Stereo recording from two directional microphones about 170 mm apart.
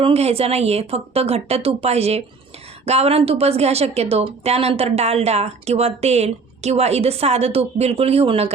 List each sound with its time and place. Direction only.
0.0 s a woman's voice: 35° right (ahead or behind)